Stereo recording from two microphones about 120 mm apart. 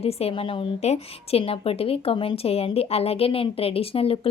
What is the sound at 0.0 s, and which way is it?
Speech, 55° left (ahead or behind).